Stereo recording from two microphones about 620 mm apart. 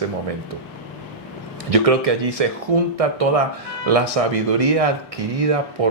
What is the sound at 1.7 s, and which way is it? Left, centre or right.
Speech, right.